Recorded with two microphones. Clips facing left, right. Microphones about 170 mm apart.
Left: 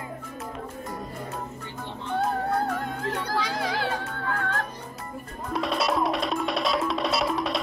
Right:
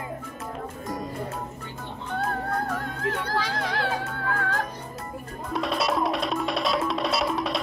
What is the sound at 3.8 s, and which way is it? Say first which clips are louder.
Music: right 1 dB; centre (ahead or behind).